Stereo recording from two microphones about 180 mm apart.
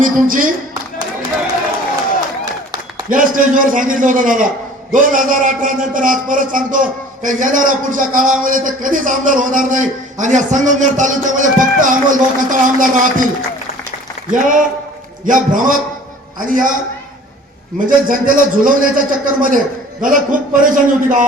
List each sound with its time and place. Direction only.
0.0 s a man's voice: 50° right (ahead or behind)
2.4 s a sound: 20° right (ahead or behind)
3.1 s a man's voice: 50° right (ahead or behind)
14.3 s a man's voice: 45° right (ahead or behind)
17.7 s a man's voice: 50° right (ahead or behind)